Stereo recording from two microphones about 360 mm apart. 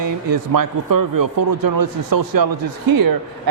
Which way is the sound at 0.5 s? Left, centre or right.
Right.